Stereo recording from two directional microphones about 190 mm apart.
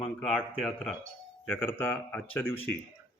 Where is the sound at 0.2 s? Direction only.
Centre (ahead or behind).